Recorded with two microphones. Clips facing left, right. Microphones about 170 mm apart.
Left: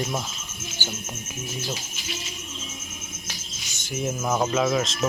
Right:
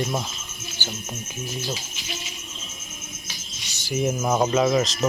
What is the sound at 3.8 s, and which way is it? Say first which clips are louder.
Speech: right 3 dB; centre (ahead or behind).